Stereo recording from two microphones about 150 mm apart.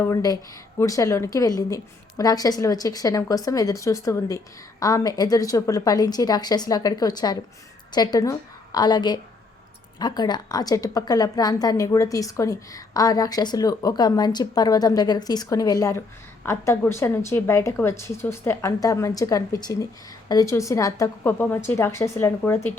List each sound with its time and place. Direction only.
0.0 s a woman's voice: 25° left (ahead or behind)